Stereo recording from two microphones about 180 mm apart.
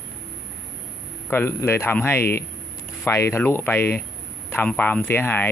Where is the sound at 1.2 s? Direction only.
10° left (ahead or behind).